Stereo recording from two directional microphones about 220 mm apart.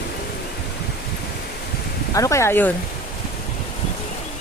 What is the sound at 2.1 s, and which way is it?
Speech, 15° left (ahead or behind).